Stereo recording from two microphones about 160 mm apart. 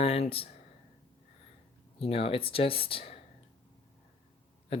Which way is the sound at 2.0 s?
35° left (ahead or behind).